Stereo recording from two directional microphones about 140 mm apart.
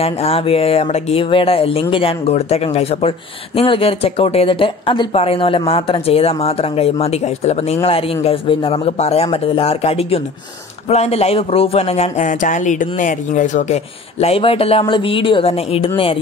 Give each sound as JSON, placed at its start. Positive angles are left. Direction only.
{"t": 0.0, "sound": "speech", "side_deg": 45}
{"t": 14.2, "sound": "speech", "side_deg": 45}